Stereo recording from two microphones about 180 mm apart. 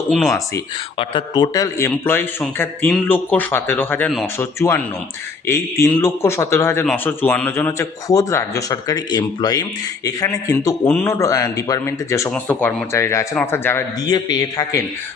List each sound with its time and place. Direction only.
0.3 s a man's voice: 15° left (ahead or behind)